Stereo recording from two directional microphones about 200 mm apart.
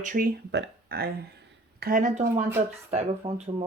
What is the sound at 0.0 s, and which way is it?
Speech, 45° right (ahead or behind).